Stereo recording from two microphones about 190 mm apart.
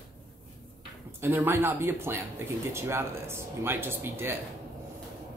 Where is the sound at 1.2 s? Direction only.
10° right (ahead or behind).